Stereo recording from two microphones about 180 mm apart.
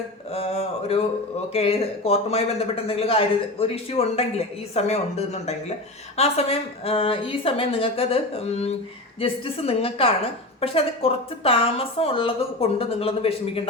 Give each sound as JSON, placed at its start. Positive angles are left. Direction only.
{"t": 0.3, "sound": "speech", "side_deg": 35}